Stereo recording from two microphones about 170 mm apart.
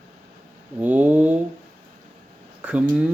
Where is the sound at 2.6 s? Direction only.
10° right (ahead or behind).